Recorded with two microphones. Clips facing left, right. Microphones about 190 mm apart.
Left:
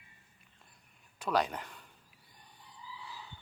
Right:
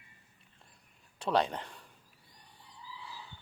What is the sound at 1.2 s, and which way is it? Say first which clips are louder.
Speech: right 2 dB; 30° right (ahead or behind).